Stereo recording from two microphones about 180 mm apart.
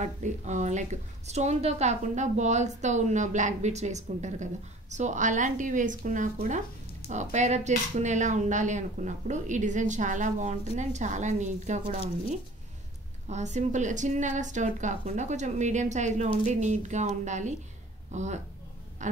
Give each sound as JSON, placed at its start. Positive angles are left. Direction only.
{"t": 0.0, "sound": "a woman's voice", "side_deg": -40}
{"t": 13.3, "sound": "a woman's voice", "side_deg": -40}